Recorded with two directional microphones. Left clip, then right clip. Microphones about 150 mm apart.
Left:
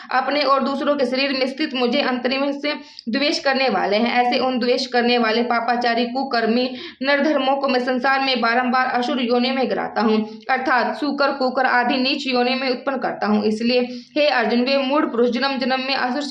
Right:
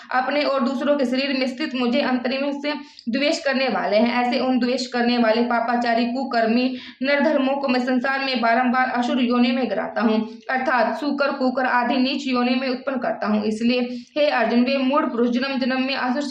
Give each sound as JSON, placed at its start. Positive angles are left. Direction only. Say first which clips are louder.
{"t": 0.1, "sound": "a man's voice", "louder": "left 3 dB", "side_deg": 20}